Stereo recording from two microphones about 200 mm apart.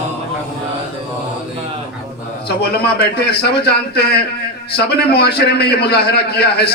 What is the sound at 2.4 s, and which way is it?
A man's voice, 55° left (ahead or behind).